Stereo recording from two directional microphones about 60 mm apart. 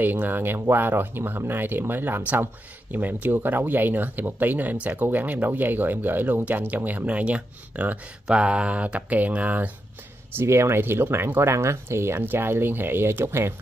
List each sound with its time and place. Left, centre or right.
0.0 s speech: right
10.3 s speech: right
11.5 s speech: right